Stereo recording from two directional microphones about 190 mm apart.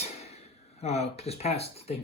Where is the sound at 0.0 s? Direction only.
35° left (ahead or behind).